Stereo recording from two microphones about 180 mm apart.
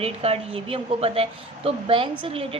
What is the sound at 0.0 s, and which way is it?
A woman's voice, 35° right (ahead or behind).